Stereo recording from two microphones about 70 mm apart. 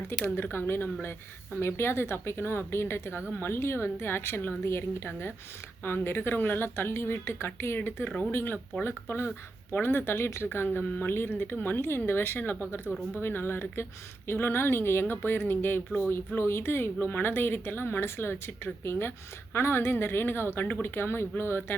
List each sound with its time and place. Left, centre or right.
0.5 s speech: left